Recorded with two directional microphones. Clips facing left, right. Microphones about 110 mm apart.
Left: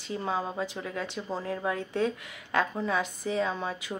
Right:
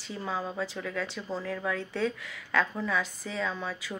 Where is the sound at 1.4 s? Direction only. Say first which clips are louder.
Left 2 dB; 40° left (ahead or behind).